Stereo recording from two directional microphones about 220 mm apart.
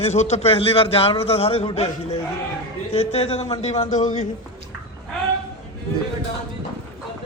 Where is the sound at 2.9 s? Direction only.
30° left (ahead or behind).